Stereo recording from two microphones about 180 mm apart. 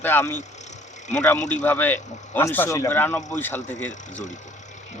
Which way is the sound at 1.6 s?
10° left (ahead or behind).